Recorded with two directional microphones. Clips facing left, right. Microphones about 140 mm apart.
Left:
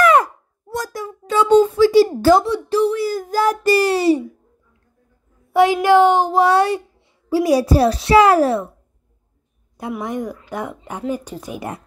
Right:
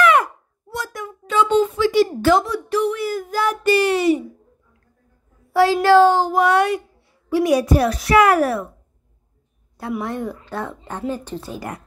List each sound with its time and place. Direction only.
0.0 s a sound: 40° left (ahead or behind)
5.5 s a child's voice: 20° left (ahead or behind)
10.0 s speech: 15° left (ahead or behind)